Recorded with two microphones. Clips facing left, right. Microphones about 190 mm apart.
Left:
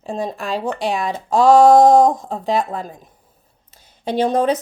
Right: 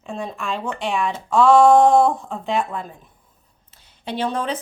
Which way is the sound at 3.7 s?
40° left (ahead or behind).